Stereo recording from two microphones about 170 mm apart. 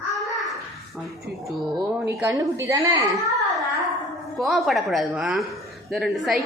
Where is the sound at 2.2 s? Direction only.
15° right (ahead or behind).